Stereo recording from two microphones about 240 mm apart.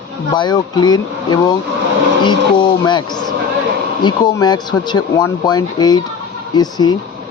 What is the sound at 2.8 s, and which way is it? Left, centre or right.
Speech, centre.